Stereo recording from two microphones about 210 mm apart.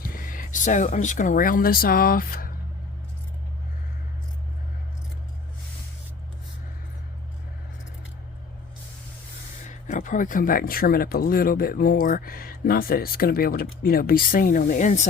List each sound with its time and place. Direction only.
0.0 s speech: 40° left (ahead or behind)
9.6 s speech: 40° left (ahead or behind)